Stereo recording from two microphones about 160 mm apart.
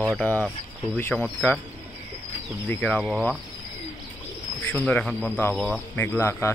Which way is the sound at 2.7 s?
10° left (ahead or behind).